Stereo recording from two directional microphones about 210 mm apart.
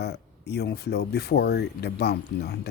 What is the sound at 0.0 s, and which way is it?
Speech, 50° left (ahead or behind).